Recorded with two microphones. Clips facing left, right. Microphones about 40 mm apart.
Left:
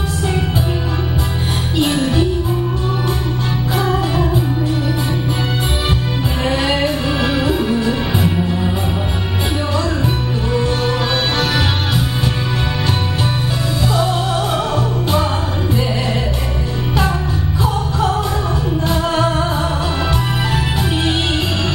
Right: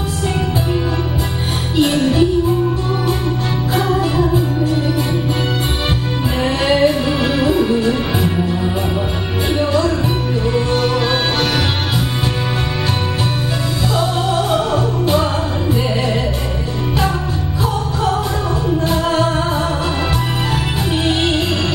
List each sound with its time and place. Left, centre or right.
3.8 s music: centre
6.4 s music: centre
7.4 s music: centre
8.2 s music: centre